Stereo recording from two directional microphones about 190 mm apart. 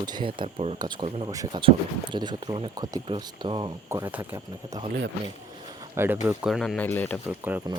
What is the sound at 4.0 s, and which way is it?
Speech, 10° right (ahead or behind).